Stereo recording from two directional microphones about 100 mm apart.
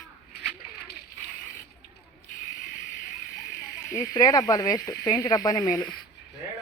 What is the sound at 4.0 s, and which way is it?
Speech, 40° left (ahead or behind).